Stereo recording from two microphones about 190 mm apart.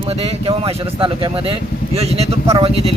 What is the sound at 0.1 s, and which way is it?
A man's voice, 30° right (ahead or behind).